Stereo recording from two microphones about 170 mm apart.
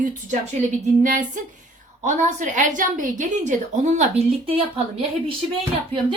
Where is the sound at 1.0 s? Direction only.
50° right (ahead or behind).